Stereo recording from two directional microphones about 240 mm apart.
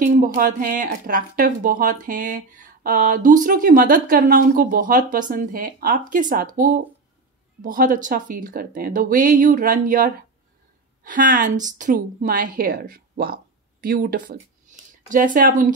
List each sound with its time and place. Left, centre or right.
0.0 s a woman's voice: right